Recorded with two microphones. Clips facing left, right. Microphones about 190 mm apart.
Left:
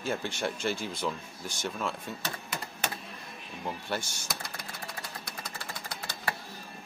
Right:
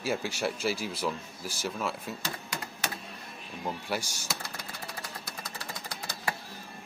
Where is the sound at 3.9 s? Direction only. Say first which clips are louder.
Right 1 dB; 5° right (ahead or behind).